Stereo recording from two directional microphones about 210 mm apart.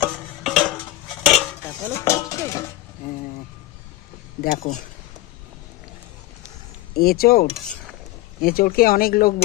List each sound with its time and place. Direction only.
0.0 s a sound: 5° left (ahead or behind)
1.2 s dishes: 5° left (ahead or behind)
4.4 s speech: 40° left (ahead or behind)
6.9 s speech: 45° left (ahead or behind)